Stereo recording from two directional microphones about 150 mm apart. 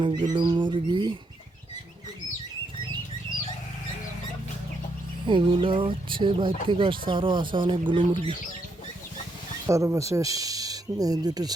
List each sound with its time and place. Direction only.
0.0 s bird: 30° right (ahead or behind)
5.2 s speech: 30° right (ahead or behind)
9.6 s speech: 20° right (ahead or behind)